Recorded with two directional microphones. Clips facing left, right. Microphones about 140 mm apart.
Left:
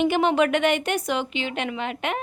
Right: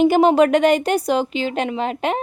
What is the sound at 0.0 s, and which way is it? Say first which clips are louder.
A woman's voice: right 7 dB; 40° right (ahead or behind).